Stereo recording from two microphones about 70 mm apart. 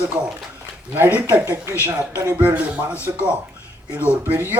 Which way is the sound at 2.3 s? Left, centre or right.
Right.